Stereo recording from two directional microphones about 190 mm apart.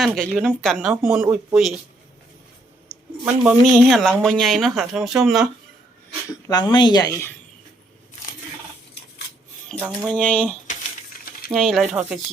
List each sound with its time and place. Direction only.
0.0 s speech: centre (ahead or behind)
2.9 s a sound: 10° right (ahead or behind)
3.2 s speech: 5° right (ahead or behind)
6.3 s speech: 20° left (ahead or behind)
9.7 s speech: 10° right (ahead or behind)
10.1 s speech: 5° left (ahead or behind)